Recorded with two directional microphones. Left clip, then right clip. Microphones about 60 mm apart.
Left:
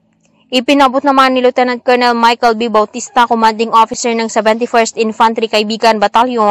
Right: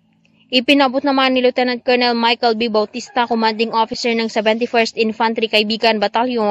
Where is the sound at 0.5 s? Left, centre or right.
Left.